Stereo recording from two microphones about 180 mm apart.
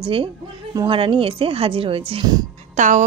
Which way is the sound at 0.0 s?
30° right (ahead or behind).